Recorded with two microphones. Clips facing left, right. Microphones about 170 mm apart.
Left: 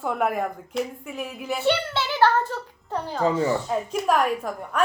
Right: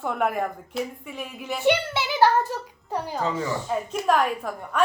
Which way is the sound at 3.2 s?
35° left (ahead or behind).